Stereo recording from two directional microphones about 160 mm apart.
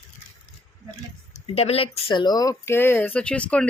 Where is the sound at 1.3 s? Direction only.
40° left (ahead or behind); by 3.6 s 5° left (ahead or behind).